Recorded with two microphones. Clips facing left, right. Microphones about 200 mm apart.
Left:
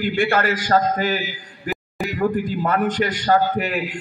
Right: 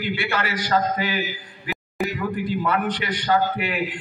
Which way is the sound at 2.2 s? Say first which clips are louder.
Left 9 dB; 45° left (ahead or behind).